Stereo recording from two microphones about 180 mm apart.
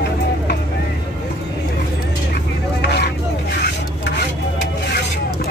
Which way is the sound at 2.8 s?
70° left (ahead or behind).